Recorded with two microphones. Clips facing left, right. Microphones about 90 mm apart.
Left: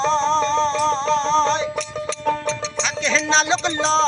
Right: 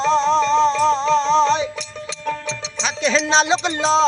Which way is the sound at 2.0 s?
40° left (ahead or behind).